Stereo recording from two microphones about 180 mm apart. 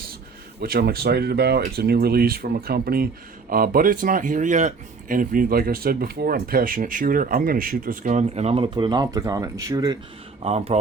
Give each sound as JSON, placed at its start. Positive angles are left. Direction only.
{"t": 0.6, "sound": "speech", "side_deg": -60}
{"t": 10.4, "sound": "speech", "side_deg": -35}